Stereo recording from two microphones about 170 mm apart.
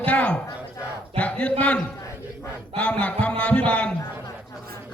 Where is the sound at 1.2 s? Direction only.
5° left (ahead or behind).